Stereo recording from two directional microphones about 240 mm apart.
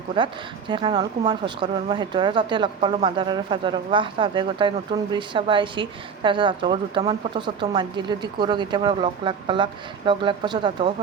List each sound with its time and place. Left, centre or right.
0.2 s speech: centre